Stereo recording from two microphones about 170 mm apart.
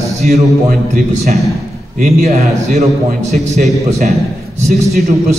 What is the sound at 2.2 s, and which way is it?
Speech, 40° right (ahead or behind).